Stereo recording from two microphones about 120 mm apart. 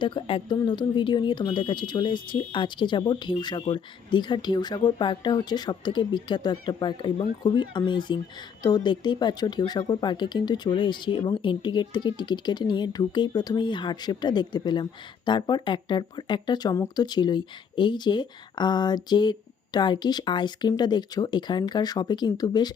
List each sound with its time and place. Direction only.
0.0 s speech: 45° left (ahead or behind)
16.7 s speech: 25° left (ahead or behind)
17.0 s speech: 35° left (ahead or behind)